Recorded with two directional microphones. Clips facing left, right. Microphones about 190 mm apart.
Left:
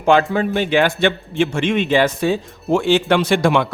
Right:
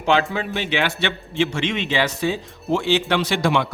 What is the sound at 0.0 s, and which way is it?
Speech, 50° left (ahead or behind).